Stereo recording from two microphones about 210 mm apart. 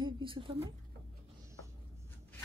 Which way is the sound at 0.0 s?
25° right (ahead or behind).